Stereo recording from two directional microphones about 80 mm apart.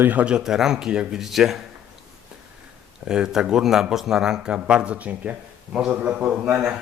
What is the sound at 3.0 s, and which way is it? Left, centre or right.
A man's voice, centre.